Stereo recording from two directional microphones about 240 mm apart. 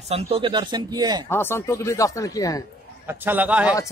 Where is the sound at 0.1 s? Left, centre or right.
Right.